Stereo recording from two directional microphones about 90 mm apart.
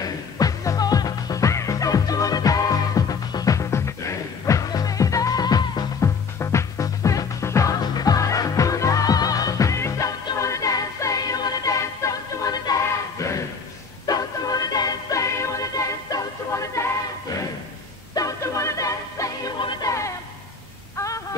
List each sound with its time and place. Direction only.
0.0 s music: 40° left (ahead or behind)
5.9 s music: 35° left (ahead or behind)
14.0 s music: 45° left (ahead or behind)
20.9 s a sound: 35° left (ahead or behind)